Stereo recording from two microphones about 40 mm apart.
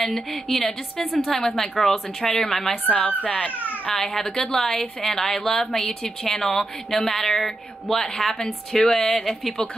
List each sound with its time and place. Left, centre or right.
0.0 s a woman's voice: centre
3.3 s speech: left
3.9 s a woman's voice: centre